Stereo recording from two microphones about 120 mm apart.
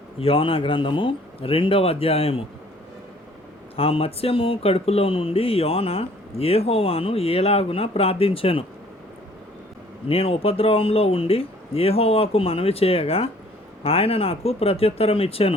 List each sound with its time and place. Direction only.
0.2 s speech: 50° left (ahead or behind)
3.8 s speech: 55° left (ahead or behind)
10.1 s speech: 55° left (ahead or behind)